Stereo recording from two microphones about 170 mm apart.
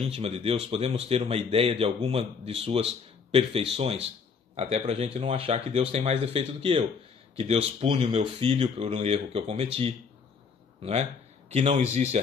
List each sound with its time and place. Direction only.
0.1 s speech: 35° right (ahead or behind)